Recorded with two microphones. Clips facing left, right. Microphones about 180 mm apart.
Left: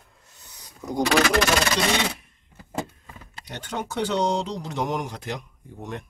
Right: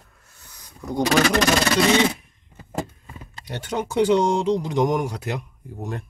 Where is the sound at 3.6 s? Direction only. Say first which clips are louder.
Right 7 dB; 10° right (ahead or behind).